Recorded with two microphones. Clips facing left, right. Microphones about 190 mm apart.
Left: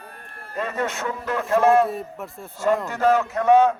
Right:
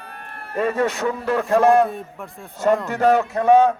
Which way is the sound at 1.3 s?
35° right (ahead or behind).